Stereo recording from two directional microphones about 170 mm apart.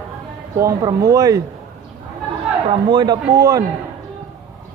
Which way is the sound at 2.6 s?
25° right (ahead or behind).